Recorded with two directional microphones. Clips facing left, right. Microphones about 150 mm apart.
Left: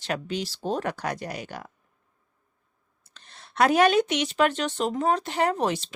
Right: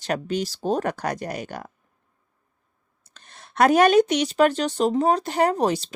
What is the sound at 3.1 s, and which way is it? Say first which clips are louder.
A woman's voice: right 2 dB; 45° right (ahead or behind).